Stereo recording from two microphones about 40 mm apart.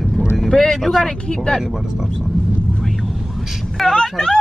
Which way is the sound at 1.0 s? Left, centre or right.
Left.